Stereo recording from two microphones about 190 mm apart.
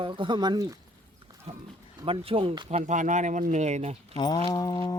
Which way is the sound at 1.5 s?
30° right (ahead or behind).